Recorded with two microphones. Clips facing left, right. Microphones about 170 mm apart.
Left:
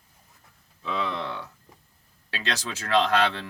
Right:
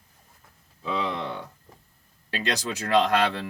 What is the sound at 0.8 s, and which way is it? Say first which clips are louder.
Speech: right 1 dB; 15° right (ahead or behind).